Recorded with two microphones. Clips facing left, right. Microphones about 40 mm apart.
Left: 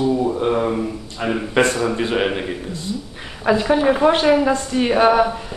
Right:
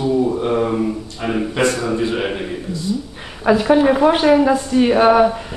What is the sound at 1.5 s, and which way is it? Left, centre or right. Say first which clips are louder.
Speech: left 2 dB; left.